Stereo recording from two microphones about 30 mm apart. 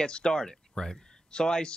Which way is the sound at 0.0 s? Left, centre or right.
Left.